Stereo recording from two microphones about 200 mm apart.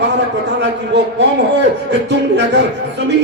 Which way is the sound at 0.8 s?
60° right (ahead or behind).